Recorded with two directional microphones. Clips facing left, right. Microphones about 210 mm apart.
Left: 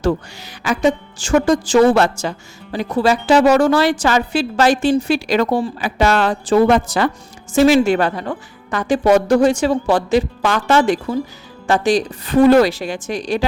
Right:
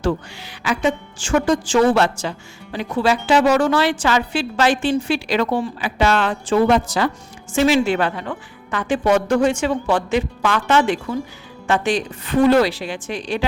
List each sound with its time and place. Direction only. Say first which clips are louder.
0.6 s a woman's voice: left 4 dB; 40° left (ahead or behind)
7.5 s a woman's voice: left 4 dB; 40° left (ahead or behind)